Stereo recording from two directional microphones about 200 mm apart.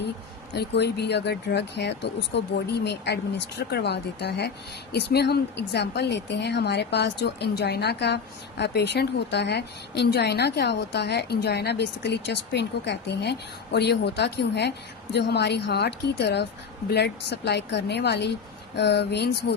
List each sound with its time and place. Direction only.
0.5 s speech: 55° left (ahead or behind)